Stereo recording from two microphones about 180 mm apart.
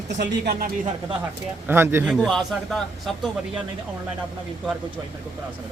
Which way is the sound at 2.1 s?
Centre (ahead or behind).